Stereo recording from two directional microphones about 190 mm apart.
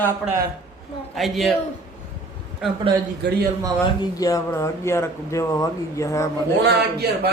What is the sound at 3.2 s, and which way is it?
Speech, 65° right (ahead or behind).